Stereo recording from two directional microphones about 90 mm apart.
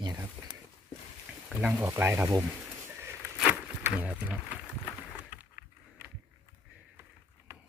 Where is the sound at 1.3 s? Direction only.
15° right (ahead or behind).